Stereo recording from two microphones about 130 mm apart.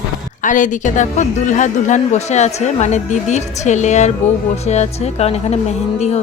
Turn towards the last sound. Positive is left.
turn(degrees=60)  # may be behind; listen again after turning